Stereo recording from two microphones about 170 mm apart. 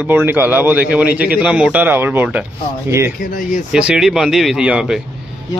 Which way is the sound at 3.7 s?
5° right (ahead or behind).